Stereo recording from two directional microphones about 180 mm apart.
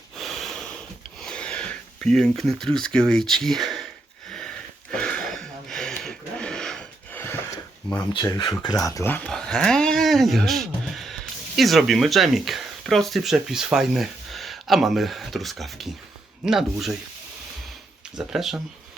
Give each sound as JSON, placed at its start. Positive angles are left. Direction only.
{"t": 0.2, "sound": "snort", "side_deg": 0}
{"t": 1.2, "sound": "speech", "side_deg": 5}
{"t": 4.3, "sound": "a sound", "side_deg": 5}
{"t": 8.1, "sound": "speech", "side_deg": 20}
{"t": 18.2, "sound": "speech", "side_deg": 0}